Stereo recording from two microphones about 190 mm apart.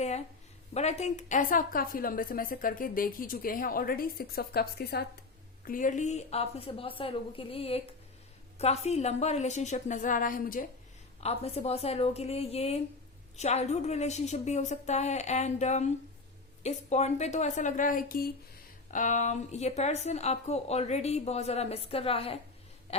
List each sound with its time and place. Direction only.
0.7 s a woman's voice: 35° left (ahead or behind); by 5.0 s 55° left (ahead or behind)
5.6 s a woman's voice: 45° left (ahead or behind)
11.2 s a woman's voice: 35° left (ahead or behind)
22.9 s a sound: 30° left (ahead or behind)